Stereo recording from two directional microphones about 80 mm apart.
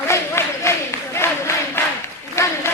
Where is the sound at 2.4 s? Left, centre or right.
Left.